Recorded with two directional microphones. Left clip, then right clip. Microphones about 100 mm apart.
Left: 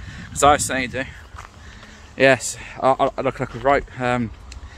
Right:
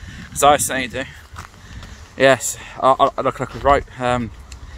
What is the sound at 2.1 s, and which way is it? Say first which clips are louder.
Speech: right 2 dB; 25° left (ahead or behind).